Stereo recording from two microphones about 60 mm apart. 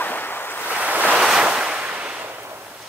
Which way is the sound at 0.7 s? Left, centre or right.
Right.